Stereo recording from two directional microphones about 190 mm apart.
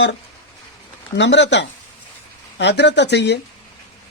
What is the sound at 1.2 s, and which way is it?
Speech, 65° left (ahead or behind).